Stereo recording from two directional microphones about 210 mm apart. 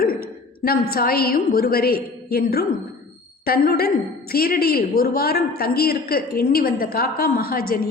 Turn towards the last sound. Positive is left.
turn(degrees=45)  # may be behind; listen again after turning